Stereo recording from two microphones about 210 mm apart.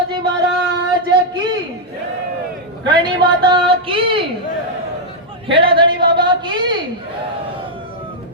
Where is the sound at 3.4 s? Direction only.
25° right (ahead or behind).